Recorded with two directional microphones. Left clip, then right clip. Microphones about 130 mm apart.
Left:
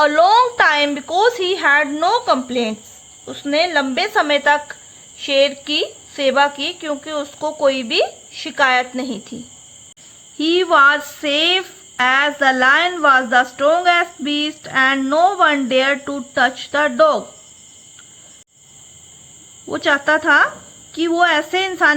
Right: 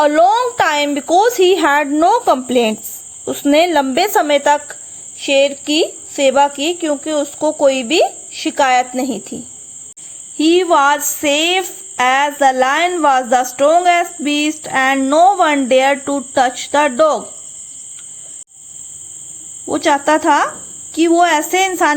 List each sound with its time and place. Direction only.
0.0 s a sound: 35° right (ahead or behind)
0.9 s speech: 35° right (ahead or behind); by 2.7 s 55° right (ahead or behind)
3.5 s cricket: 55° right (ahead or behind); by 4.8 s 30° right (ahead or behind)
5.2 s speech: 30° right (ahead or behind)
10.3 s cricket: 40° right (ahead or behind)
19.7 s cricket: 35° right (ahead or behind)